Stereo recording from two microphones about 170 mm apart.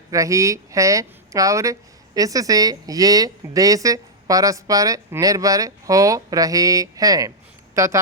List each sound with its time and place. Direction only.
0.1 s a woman's voice: 20° right (ahead or behind)